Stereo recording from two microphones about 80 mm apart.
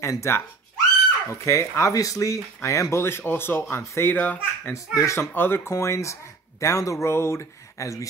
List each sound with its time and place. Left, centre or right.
0.0 s speech: left
4.7 s speech: left
5.3 s speech: left